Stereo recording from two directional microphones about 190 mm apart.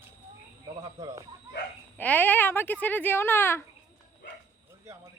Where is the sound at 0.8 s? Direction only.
20° right (ahead or behind).